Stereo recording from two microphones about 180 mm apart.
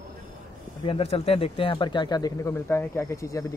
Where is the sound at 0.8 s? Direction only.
35° left (ahead or behind).